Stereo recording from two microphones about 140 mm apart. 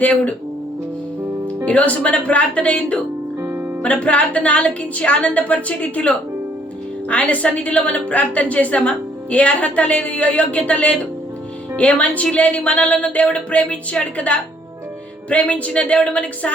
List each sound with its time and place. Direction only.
0.0 s a woman's voice: 10° left (ahead or behind)
1.6 s a woman's voice: 10° left (ahead or behind)
3.4 s music: 15° right (ahead or behind)
3.8 s a woman's voice: 10° left (ahead or behind)